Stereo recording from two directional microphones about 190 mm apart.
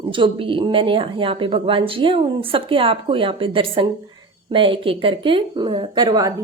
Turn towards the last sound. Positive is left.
turn(degrees=-20)  # may be behind; listen again after turning